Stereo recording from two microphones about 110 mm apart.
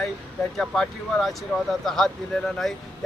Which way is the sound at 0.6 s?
5° left (ahead or behind).